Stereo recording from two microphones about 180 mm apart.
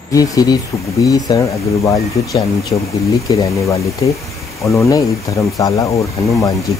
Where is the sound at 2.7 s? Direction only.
25° left (ahead or behind).